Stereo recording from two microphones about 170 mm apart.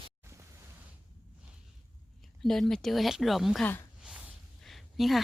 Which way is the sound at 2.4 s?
5° left (ahead or behind).